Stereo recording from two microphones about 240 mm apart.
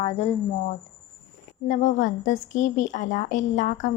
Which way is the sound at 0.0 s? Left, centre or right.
Left.